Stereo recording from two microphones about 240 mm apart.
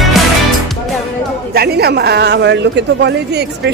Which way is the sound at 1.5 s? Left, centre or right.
Right.